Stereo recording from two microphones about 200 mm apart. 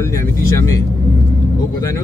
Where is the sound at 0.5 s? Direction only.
15° left (ahead or behind).